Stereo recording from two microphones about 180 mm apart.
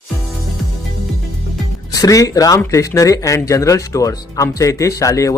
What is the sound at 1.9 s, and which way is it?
Speech, 20° left (ahead or behind).